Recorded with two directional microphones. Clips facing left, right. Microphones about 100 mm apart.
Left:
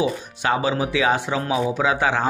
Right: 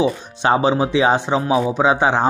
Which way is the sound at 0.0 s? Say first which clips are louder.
Right 4 dB; 25° right (ahead or behind).